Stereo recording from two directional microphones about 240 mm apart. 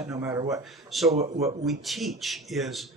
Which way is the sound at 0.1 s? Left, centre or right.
Centre.